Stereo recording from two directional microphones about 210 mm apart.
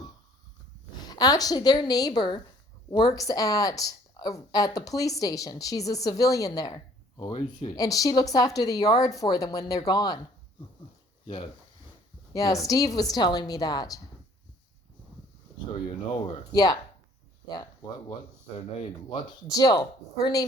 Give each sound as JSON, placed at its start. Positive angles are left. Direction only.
{"t": 1.0, "sound": "a woman's voice", "side_deg": 20}
{"t": 12.3, "sound": "speech", "side_deg": 15}
{"t": 16.1, "sound": "speech", "side_deg": 20}
{"t": 18.8, "sound": "speech", "side_deg": 20}